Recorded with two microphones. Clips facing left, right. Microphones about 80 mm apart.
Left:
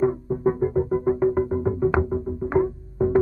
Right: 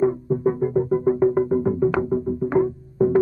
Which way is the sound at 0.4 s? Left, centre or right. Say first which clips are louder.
Left 1 dB; centre.